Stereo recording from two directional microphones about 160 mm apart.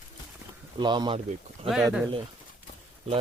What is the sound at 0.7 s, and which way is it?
Speech, 30° right (ahead or behind).